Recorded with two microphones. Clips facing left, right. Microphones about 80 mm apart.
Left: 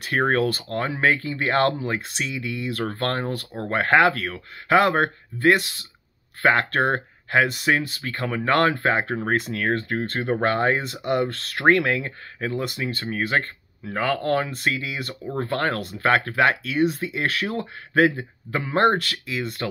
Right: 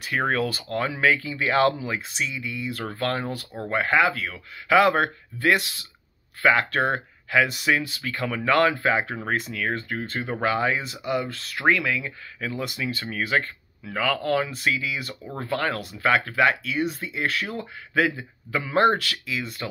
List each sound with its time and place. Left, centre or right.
0.2 s speech: left
1.9 s speech: left
2.9 s speech: left
3.8 s speech: left
4.3 s speech: left
6.4 s speech: left
7.4 s speech: left
12.4 s speech: left
13.4 s speech: left
17.9 s a man's voice: left